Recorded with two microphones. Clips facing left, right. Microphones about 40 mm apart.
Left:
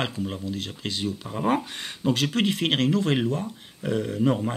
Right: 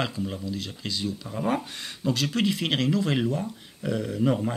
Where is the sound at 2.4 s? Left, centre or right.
Left.